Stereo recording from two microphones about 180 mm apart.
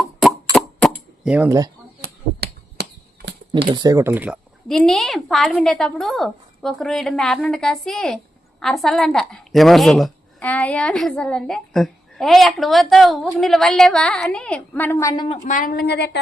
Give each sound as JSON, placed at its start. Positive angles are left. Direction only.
{"t": 1.2, "sound": "speech", "side_deg": -5}
{"t": 1.5, "sound": "speech", "side_deg": -20}
{"t": 2.4, "sound": "finger snapping", "side_deg": -65}
{"t": 3.7, "sound": "speech", "side_deg": -25}
{"t": 4.7, "sound": "a woman's voice", "side_deg": 0}
{"t": 15.4, "sound": "a woman's voice", "side_deg": 50}